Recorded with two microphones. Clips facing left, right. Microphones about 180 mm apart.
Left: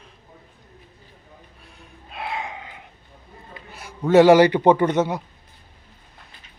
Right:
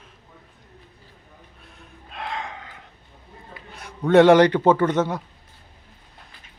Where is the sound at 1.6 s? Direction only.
Centre (ahead or behind); by 2.9 s 15° left (ahead or behind).